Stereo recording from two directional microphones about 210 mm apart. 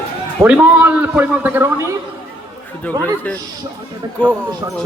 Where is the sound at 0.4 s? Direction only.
5° right (ahead or behind).